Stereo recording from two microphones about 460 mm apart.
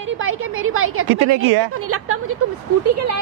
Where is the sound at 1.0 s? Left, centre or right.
Right.